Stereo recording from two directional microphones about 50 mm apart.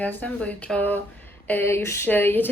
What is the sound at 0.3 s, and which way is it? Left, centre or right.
Speech, left.